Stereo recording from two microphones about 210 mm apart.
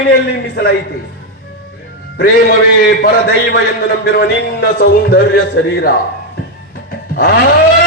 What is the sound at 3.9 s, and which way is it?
A man's voice, 50° left (ahead or behind).